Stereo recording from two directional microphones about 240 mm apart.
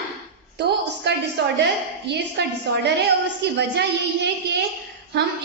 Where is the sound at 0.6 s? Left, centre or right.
Right.